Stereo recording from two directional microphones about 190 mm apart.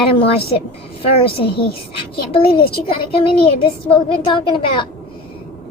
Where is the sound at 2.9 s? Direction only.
30° left (ahead or behind).